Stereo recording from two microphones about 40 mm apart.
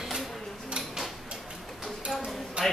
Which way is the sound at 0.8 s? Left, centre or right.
Right.